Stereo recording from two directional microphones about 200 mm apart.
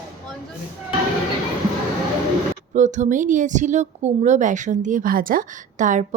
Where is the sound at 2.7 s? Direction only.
35° right (ahead or behind).